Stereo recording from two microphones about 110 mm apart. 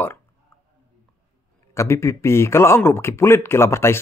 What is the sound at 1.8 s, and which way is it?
Speech, 25° left (ahead or behind).